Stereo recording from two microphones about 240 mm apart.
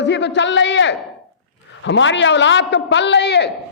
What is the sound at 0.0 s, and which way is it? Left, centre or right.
A man's voice, left.